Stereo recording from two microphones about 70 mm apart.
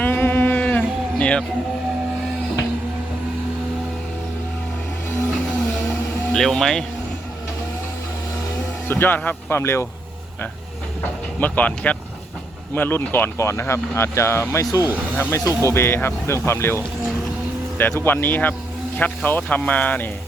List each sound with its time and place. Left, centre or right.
0.0 s a sound: left
6.3 s speech: centre
8.9 s speech: left
9.6 s speech: left
11.3 s speech: left
13.3 s speech: left